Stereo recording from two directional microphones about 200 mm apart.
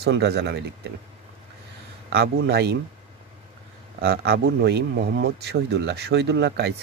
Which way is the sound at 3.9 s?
50° right (ahead or behind).